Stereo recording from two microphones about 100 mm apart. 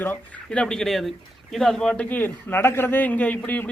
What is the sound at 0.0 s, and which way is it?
Speech, 20° left (ahead or behind).